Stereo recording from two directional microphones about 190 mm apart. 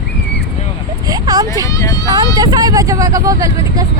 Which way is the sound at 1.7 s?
15° left (ahead or behind).